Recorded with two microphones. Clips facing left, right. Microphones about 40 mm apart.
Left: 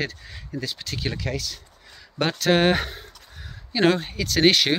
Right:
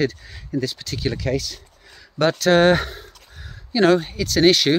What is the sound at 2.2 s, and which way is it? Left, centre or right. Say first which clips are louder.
Speech: right 5 dB; centre.